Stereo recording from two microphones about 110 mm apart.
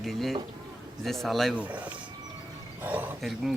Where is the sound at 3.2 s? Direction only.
Centre (ahead or behind).